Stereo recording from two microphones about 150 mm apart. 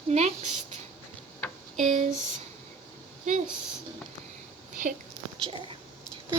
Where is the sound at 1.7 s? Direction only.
50° right (ahead or behind).